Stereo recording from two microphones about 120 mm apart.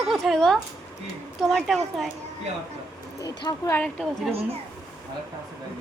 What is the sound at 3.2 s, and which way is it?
Speech, 35° left (ahead or behind).